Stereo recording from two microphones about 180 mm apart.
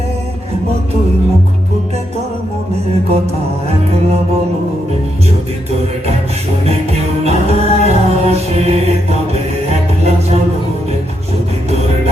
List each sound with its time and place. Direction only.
7.3 s music: 35° right (ahead or behind)